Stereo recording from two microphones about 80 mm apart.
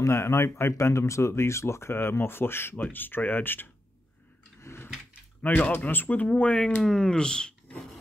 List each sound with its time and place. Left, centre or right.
0.0 s speech: left
4.6 s drawer open or close: left
5.4 s speech: left